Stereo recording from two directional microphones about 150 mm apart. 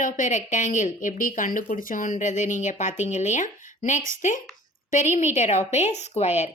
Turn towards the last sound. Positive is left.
turn(degrees=50)  # may be behind; listen again after turning